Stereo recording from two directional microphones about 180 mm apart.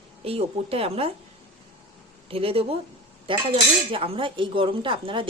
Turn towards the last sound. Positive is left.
turn(degrees=-30)  # may be behind; listen again after turning